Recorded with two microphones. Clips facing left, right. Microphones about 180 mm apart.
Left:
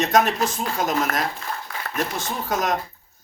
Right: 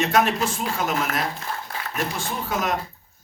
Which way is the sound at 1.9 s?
40° left (ahead or behind).